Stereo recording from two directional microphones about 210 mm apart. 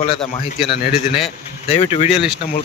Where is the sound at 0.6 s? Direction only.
55° left (ahead or behind).